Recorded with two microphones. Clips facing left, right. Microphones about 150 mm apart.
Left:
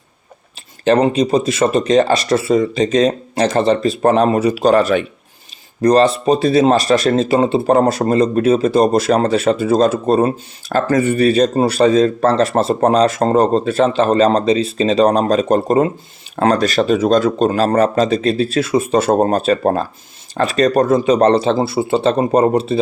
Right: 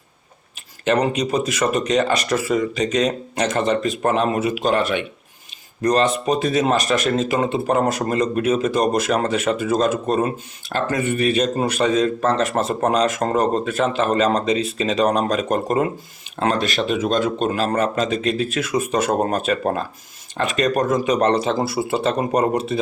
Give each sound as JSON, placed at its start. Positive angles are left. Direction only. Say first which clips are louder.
{"t": 0.9, "sound": "speech", "louder": "left 6 dB", "side_deg": 30}